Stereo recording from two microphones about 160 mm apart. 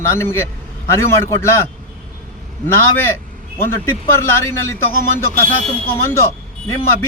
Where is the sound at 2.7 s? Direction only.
15° left (ahead or behind).